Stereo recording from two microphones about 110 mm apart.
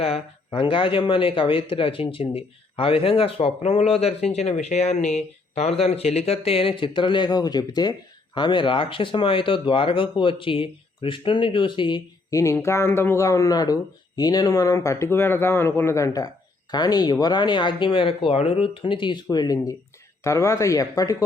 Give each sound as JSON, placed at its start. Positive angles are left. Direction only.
{"t": 0.0, "sound": "speech", "side_deg": 60}
{"t": 12.3, "sound": "speech", "side_deg": 30}
{"t": 20.2, "sound": "speech", "side_deg": 25}